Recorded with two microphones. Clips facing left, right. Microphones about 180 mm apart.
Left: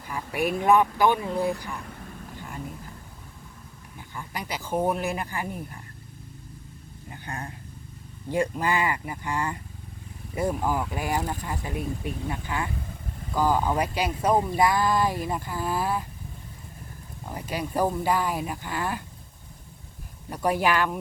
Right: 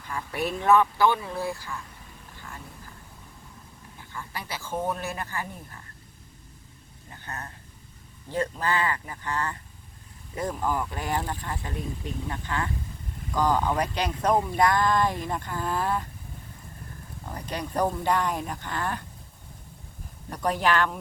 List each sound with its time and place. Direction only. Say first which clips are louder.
0.1 s speech: left 3 dB; 10° left (ahead or behind)
4.1 s speech: left 3 dB; 15° left (ahead or behind)
7.1 s speech: left 3 dB; 10° left (ahead or behind)
17.2 s speech: left 2 dB; 10° left (ahead or behind)
20.3 s speech: left 1 dB; 10° left (ahead or behind)